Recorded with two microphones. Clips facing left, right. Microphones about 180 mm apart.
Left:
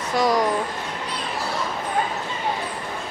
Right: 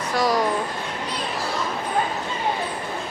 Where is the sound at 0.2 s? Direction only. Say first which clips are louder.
Left 1 dB; 20° left (ahead or behind).